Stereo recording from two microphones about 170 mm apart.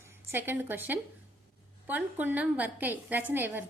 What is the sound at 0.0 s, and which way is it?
Speech, 15° right (ahead or behind).